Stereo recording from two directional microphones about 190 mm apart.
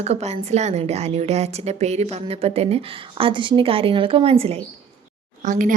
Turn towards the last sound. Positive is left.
turn(degrees=-45)  # may be behind; listen again after turning